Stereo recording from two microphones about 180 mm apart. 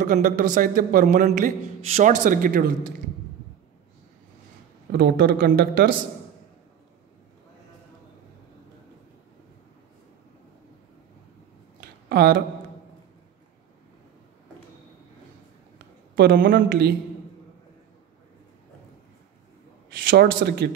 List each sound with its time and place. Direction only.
0.0 s a man's voice: 45° right (ahead or behind)
4.9 s speech: 65° right (ahead or behind)
12.1 s speech: 60° right (ahead or behind)
16.3 s a man's voice: 50° right (ahead or behind)
20.1 s speech: 65° right (ahead or behind)